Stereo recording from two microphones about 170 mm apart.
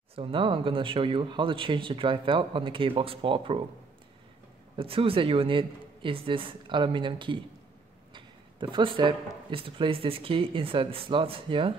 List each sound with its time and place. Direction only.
0.1 s speech: 30° right (ahead or behind)
4.7 s speech: 35° right (ahead or behind)